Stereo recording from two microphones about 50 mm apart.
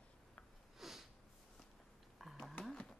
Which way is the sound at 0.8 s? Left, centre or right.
Centre.